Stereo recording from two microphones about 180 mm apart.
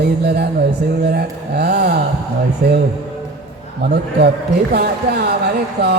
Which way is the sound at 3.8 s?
55° right (ahead or behind).